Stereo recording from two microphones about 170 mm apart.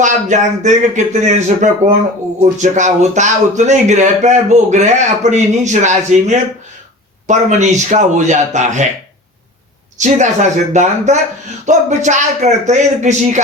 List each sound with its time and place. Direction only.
0.0 s speech: 45° right (ahead or behind)
10.0 s speech: 45° right (ahead or behind)